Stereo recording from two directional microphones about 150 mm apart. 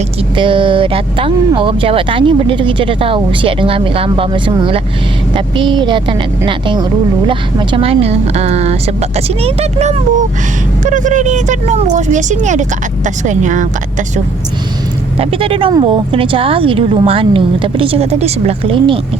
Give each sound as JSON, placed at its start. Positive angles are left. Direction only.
{"t": 0.3, "sound": "speech", "side_deg": -35}
{"t": 10.8, "sound": "speech", "side_deg": -55}
{"t": 15.2, "sound": "speech", "side_deg": -40}